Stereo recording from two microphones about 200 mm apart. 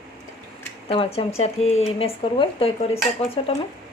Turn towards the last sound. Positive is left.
turn(degrees=30)  # may be behind; listen again after turning